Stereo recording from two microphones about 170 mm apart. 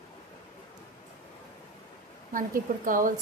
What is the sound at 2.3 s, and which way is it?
Speech, 50° right (ahead or behind).